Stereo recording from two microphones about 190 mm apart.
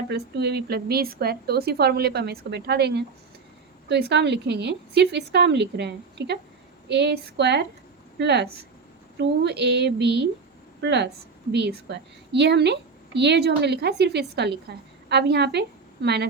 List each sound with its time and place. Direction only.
0.1 s a woman's voice: 60° right (ahead or behind)